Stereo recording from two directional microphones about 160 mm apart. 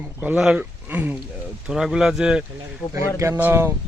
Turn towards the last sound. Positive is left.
turn(degrees=-15)  # may be behind; listen again after turning